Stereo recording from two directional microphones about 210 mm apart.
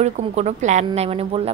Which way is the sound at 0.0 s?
30° right (ahead or behind).